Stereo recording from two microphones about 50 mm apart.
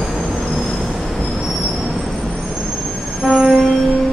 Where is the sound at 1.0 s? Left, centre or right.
Centre.